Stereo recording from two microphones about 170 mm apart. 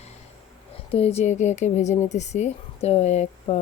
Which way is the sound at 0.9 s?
35° left (ahead or behind).